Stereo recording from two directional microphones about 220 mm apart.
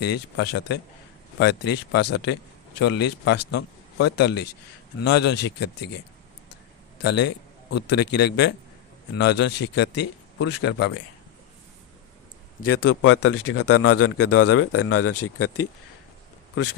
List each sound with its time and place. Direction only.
0.0 s a man's voice: 50° left (ahead or behind)
7.0 s a man's voice: 50° left (ahead or behind)
12.6 s a man's voice: 90° left
13.0 s a man's voice: 75° left (ahead or behind); by 15.6 s 90° left